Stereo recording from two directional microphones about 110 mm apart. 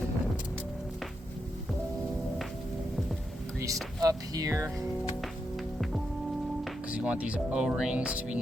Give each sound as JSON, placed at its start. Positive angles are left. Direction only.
{"t": 4.0, "sound": "speech", "side_deg": -35}
{"t": 6.9, "sound": "speech", "side_deg": -10}